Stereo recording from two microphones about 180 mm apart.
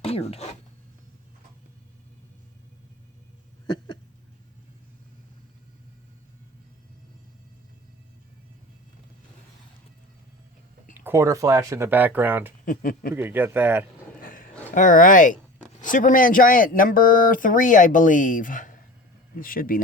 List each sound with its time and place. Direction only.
0.0 s zipper: 35° left (ahead or behind)
11.0 s speech: 15° right (ahead or behind)
12.6 s speech: 50° left (ahead or behind)
13.1 s speech: 10° right (ahead or behind)
14.2 s a sound: 50° left (ahead or behind)
14.8 s speech: 50° left (ahead or behind)